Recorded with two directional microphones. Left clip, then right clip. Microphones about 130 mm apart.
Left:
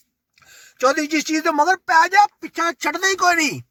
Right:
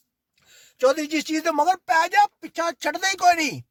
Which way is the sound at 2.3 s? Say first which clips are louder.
Left 4 dB; 15° right (ahead or behind).